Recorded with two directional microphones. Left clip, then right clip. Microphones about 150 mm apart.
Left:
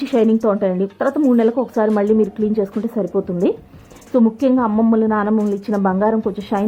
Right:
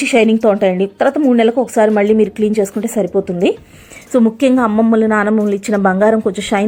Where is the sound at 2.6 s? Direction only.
20° right (ahead or behind).